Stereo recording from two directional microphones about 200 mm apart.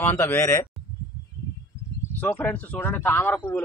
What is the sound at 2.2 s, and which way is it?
Speech, 5° left (ahead or behind).